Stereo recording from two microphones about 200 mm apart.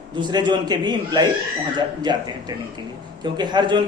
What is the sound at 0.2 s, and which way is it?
A man's voice, 20° right (ahead or behind).